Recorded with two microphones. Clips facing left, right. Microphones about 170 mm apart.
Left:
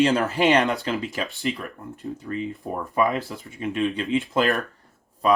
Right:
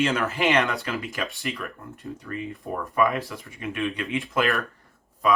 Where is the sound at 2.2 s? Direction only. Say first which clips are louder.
Left 3 dB; 30° left (ahead or behind).